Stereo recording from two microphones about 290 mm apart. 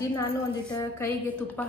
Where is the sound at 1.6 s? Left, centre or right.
Centre.